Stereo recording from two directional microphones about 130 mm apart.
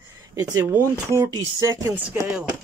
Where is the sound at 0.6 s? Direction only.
20° right (ahead or behind).